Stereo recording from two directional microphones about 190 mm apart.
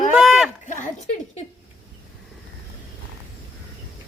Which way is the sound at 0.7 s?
40° left (ahead or behind).